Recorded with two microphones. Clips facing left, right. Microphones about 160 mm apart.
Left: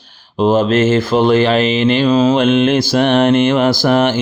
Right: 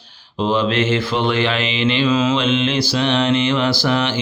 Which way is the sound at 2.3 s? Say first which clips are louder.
Left 6 dB; 50° left (ahead or behind).